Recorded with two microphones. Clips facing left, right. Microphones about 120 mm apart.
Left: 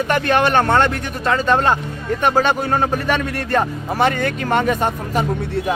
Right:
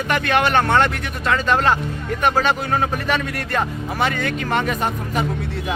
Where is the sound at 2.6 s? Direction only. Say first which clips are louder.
Left 3 dB; 35° left (ahead or behind).